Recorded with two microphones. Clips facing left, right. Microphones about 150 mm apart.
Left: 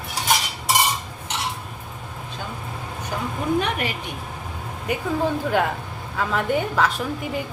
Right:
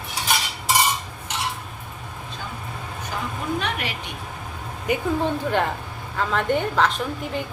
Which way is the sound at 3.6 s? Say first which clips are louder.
Left 4 dB; 50° left (ahead or behind).